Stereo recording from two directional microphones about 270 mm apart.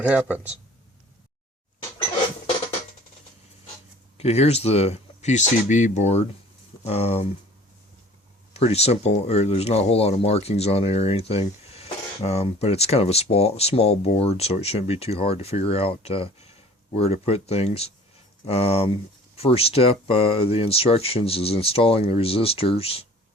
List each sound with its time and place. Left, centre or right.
0.0 s speech: centre
4.2 s speech: left
8.5 s speech: left